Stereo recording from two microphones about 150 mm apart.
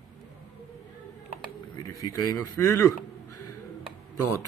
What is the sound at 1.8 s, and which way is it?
A man's voice, 25° left (ahead or behind).